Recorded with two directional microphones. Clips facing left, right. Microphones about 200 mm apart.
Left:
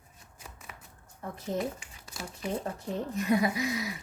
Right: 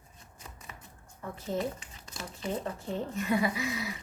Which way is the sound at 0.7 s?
5° left (ahead or behind).